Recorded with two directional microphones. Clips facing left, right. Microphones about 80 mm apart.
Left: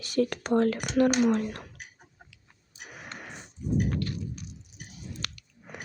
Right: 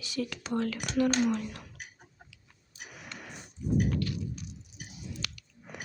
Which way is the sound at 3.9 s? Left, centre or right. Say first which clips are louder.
Even; left.